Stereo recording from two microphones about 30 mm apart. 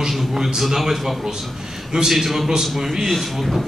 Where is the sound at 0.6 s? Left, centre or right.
Centre.